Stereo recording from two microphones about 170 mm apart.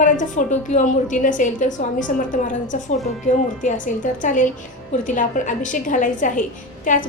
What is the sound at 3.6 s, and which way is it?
A woman's voice, 45° left (ahead or behind).